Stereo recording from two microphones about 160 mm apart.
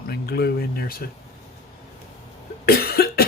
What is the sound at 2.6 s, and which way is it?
Cough, 75° left (ahead or behind).